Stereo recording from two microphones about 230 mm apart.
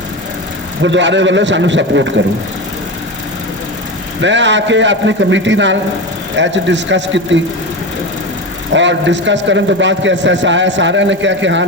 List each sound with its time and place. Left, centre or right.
0.8 s a man's voice: right
4.2 s a man's voice: right
8.7 s a man's voice: right